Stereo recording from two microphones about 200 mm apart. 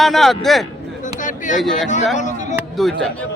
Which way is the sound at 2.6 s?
Centre (ahead or behind).